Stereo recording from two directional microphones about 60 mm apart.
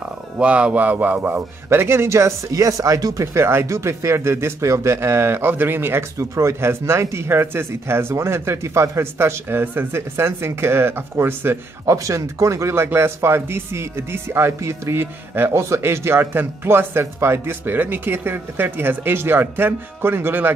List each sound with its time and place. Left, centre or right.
0.4 s speech: centre
1.7 s speech: right
2.0 s speech: right
3.3 s speech: right
3.6 s speech: right
4.9 s speech: right
6.1 s speech: right
11.9 s speech: right